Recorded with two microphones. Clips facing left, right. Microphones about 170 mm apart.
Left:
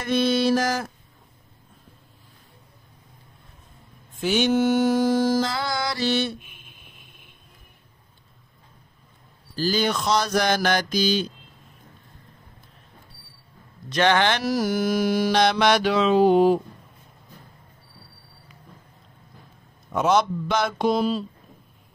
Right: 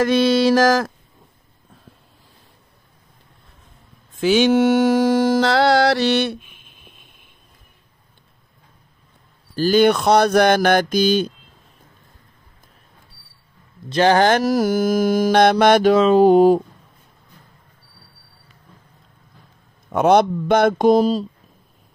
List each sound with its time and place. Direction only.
0.0 s a sound: 90° right
4.2 s mantra: 90° right; by 6.3 s 70° right (ahead or behind)
9.6 s mantra: 60° right (ahead or behind)
13.8 s mantra: 35° right (ahead or behind)
19.9 s mantra: 60° right (ahead or behind); by 21.3 s 40° right (ahead or behind)